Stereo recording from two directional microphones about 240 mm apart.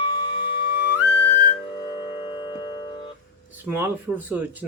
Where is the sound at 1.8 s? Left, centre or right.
Centre.